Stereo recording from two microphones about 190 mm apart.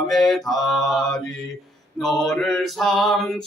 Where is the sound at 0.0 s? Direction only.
Centre (ahead or behind).